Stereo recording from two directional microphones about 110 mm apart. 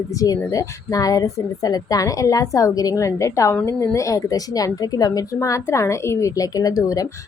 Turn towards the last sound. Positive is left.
turn(degrees=30)  # may be behind; listen again after turning